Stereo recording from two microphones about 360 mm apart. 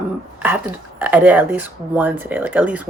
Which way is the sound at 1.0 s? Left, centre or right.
Centre.